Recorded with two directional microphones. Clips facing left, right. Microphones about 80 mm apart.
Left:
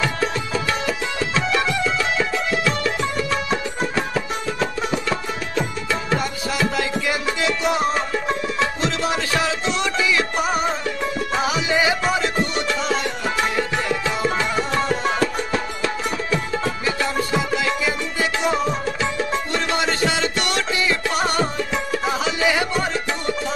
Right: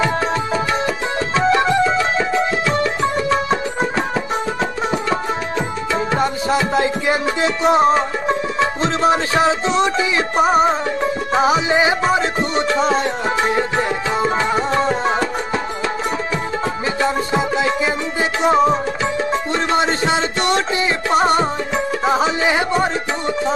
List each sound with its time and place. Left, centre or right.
0.8 s music: right
6.1 s music: right
17.0 s music: right